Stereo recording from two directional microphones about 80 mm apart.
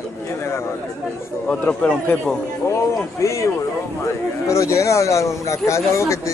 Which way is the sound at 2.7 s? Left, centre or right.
Left.